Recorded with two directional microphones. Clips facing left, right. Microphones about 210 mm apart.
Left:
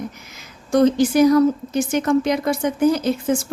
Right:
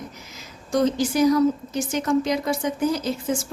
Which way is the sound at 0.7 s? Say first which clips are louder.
Left 6 dB; 60° left (ahead or behind).